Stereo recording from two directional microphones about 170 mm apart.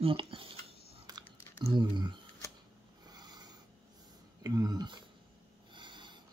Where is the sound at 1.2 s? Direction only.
15° left (ahead or behind).